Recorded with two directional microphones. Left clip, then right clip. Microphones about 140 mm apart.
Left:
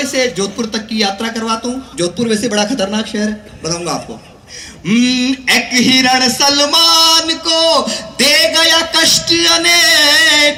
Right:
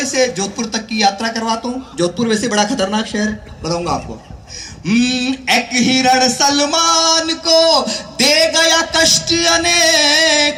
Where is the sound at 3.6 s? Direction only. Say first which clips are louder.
Right 1 dB; 20° right (ahead or behind).